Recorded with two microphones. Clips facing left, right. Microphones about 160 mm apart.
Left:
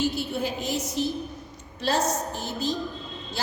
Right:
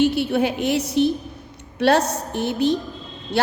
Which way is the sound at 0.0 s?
65° right (ahead or behind).